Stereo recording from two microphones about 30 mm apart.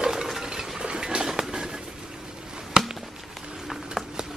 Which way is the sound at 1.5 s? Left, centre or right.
Right.